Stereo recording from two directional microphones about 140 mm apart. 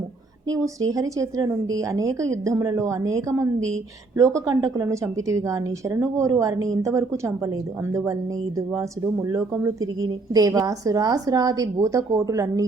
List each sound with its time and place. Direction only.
0.4 s a woman's voice: 25° right (ahead or behind)
8.5 s a woman's voice: 25° right (ahead or behind)